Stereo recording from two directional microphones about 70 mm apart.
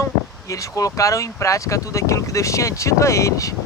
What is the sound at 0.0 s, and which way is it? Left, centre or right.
Speech, left.